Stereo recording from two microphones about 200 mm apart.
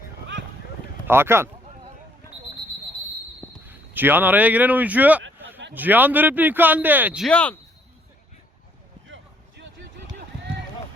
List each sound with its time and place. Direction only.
1.0 s a man's voice: 10° right (ahead or behind)
3.7 s a man's voice: 10° right (ahead or behind)
7.3 s speech: 5° left (ahead or behind)
9.0 s a sound: 65° right (ahead or behind)